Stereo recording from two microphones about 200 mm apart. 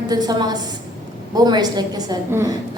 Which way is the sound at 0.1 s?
20° right (ahead or behind).